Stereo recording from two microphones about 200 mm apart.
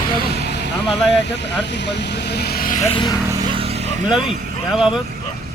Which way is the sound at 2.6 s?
35° left (ahead or behind).